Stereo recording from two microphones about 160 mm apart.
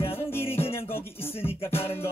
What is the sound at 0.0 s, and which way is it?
Music, 35° left (ahead or behind).